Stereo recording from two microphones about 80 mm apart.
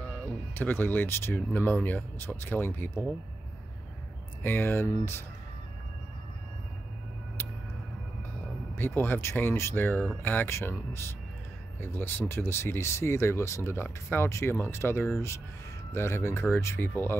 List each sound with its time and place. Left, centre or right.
0.1 s speech: left
4.4 s speech: left
8.7 s speech: left